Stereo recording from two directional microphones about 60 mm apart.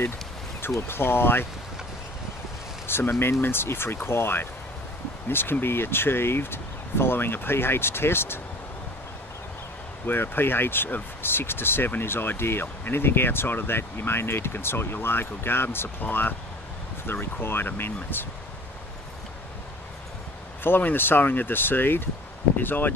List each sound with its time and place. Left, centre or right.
0.6 s speech: left
2.9 s speech: left
10.0 s speech: left
20.6 s speech: left